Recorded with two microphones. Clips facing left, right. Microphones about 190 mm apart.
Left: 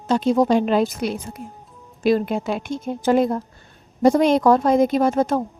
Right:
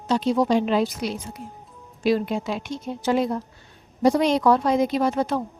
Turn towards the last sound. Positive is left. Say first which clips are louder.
# left 4 dB
turn(degrees=45)  # may be behind; listen again after turning